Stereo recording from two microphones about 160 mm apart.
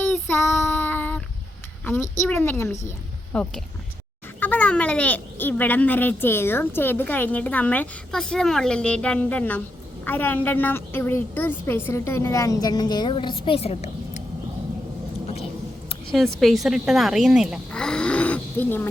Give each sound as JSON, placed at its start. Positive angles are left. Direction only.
{"t": 0.6, "sound": "child singing", "side_deg": 10}
{"t": 1.8, "sound": "a woman's voice", "side_deg": 15}
{"t": 16.1, "sound": "a woman's voice", "side_deg": 0}
{"t": 17.7, "sound": "a sound", "side_deg": 5}